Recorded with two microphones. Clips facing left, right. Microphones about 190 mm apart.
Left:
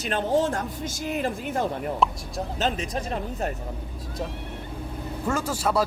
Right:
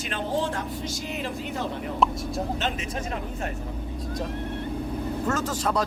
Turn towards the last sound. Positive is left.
turn(degrees=10)  # may be behind; listen again after turning